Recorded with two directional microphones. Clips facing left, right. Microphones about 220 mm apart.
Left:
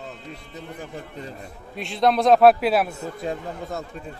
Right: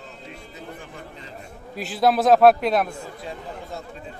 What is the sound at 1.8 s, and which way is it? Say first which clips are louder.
A man's voice: even; 5° right (ahead or behind).